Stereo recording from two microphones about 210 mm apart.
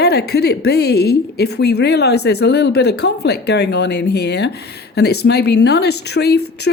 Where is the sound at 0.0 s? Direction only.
50° left (ahead or behind).